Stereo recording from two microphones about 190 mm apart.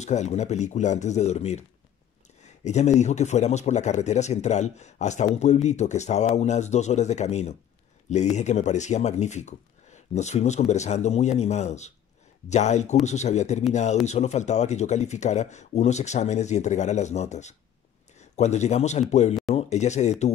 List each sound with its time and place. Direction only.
0.0 s speech: 35° left (ahead or behind)
2.6 s speech: 35° left (ahead or behind)